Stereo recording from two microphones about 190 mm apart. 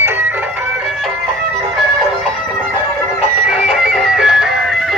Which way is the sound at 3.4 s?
5° right (ahead or behind).